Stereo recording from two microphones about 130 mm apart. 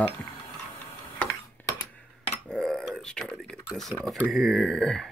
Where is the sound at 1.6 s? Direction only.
15° left (ahead or behind).